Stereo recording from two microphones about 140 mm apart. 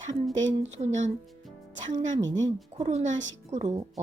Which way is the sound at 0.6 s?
55° right (ahead or behind).